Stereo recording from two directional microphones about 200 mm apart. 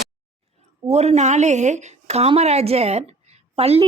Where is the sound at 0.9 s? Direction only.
35° right (ahead or behind).